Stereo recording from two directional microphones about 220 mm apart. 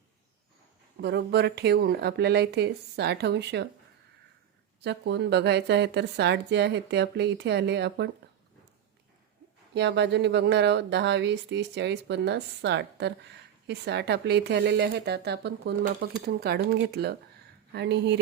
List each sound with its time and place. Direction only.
1.0 s speech: 50° right (ahead or behind)
4.8 s speech: 50° right (ahead or behind)
9.7 s speech: 50° right (ahead or behind)